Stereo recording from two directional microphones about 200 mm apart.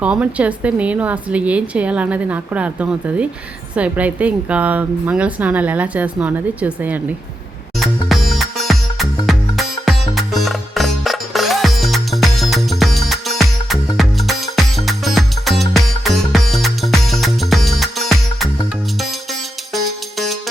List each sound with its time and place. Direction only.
0.0 s a woman's voice: 5° right (ahead or behind)
7.8 s music: centre (ahead or behind)